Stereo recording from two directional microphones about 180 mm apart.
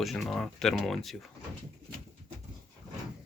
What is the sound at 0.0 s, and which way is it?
Speech, centre (ahead or behind).